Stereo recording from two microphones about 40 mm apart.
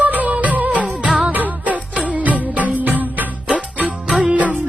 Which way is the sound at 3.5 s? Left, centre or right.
Right.